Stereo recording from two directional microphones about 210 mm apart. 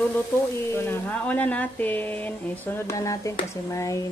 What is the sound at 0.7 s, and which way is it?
Speech, 10° left (ahead or behind).